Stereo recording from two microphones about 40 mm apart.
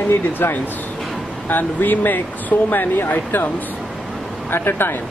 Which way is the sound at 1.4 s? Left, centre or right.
Left.